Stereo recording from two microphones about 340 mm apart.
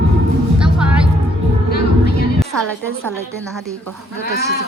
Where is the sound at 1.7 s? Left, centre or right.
Left.